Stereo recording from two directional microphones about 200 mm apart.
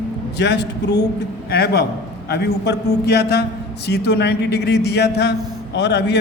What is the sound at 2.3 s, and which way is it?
A man's voice, 55° left (ahead or behind).